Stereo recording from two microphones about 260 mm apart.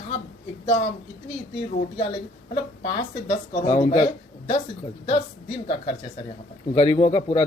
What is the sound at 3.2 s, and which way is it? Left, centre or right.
Speech, centre.